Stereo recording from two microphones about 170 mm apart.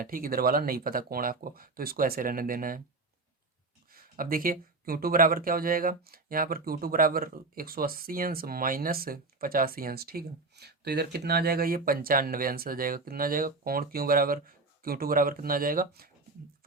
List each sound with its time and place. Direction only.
0.0 s speech: 55° right (ahead or behind)
3.9 s speech: 55° right (ahead or behind)